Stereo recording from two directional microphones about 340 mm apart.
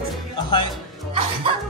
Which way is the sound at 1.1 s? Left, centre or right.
Centre.